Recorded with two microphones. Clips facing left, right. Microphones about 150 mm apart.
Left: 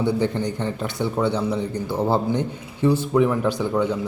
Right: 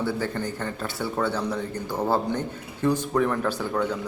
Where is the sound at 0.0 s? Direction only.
20° left (ahead or behind).